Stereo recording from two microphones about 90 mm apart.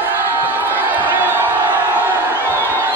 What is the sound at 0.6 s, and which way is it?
Crowd, 20° right (ahead or behind).